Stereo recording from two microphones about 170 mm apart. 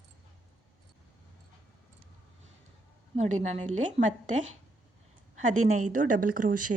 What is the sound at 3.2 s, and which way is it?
A woman's voice, 45° right (ahead or behind).